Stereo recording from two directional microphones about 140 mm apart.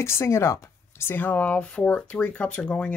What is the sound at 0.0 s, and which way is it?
Speech, 20° left (ahead or behind).